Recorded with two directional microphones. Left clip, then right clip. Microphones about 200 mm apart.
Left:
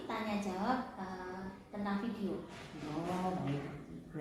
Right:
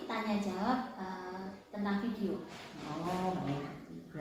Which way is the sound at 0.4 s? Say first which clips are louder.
Right 2 dB; 15° left (ahead or behind).